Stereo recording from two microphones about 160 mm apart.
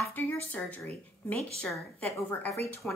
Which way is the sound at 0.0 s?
15° left (ahead or behind).